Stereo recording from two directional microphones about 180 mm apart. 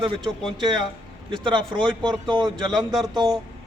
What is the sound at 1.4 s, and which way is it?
A man's voice, 25° right (ahead or behind).